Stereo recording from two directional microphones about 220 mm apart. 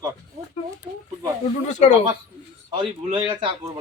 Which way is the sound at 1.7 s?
35° left (ahead or behind).